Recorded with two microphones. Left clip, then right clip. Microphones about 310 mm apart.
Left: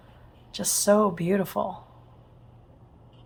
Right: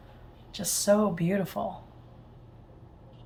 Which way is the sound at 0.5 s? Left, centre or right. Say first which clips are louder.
Left 3 dB; centre.